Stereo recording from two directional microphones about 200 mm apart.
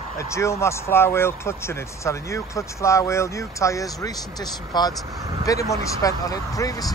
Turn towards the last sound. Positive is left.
turn(degrees=20)  # may be behind; listen again after turning